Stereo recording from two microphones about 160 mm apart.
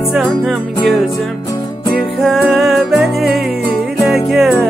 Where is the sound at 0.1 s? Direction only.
Centre (ahead or behind).